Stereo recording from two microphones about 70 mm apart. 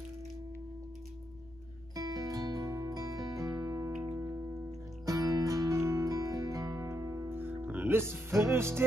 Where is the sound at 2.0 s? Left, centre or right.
Right.